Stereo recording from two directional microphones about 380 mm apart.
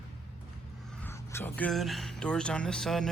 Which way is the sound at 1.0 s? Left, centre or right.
Centre.